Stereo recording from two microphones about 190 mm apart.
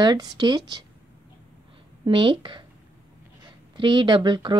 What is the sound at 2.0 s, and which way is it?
Speech, 25° right (ahead or behind).